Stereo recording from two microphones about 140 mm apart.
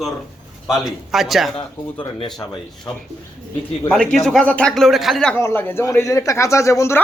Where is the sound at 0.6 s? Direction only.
Centre (ahead or behind).